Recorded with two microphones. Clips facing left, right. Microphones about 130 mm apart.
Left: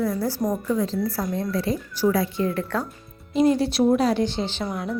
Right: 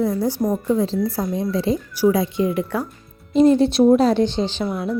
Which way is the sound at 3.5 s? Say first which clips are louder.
Right 6 dB; 25° right (ahead or behind).